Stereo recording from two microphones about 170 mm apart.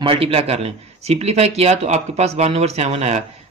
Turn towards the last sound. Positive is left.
turn(degrees=-40)  # may be behind; listen again after turning